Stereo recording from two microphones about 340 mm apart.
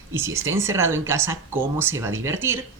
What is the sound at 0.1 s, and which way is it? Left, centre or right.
Speech, centre.